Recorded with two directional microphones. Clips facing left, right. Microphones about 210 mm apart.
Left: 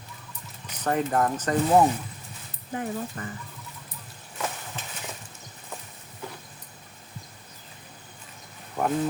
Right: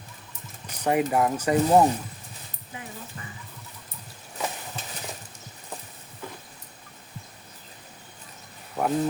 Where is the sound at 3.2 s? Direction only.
50° left (ahead or behind).